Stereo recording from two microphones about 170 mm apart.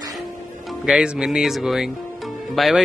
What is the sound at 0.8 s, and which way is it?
Speech, 5° right (ahead or behind).